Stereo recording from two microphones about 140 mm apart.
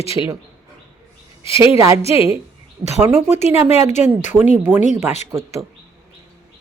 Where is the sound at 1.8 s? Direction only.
20° right (ahead or behind).